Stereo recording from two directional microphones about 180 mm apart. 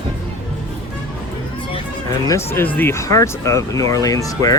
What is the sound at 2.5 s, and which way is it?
Speech, 10° left (ahead or behind).